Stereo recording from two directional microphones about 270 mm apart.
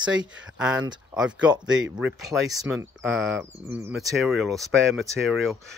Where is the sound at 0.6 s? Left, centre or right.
Centre.